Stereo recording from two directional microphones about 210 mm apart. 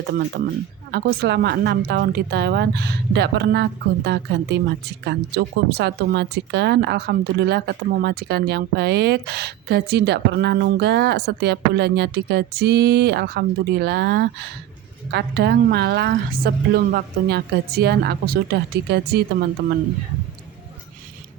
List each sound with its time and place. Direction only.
0.1 s a woman's voice: 50° right (ahead or behind)